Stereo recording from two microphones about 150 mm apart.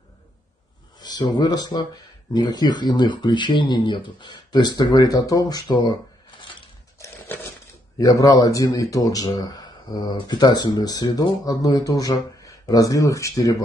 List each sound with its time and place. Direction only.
1.0 s speech: 30° left (ahead or behind)
8.0 s speech: 25° left (ahead or behind)